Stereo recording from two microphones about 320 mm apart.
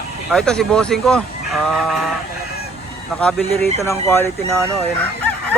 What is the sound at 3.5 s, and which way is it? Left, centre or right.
Speech, centre.